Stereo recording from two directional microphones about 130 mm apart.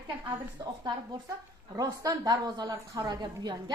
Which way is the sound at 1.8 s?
30° right (ahead or behind).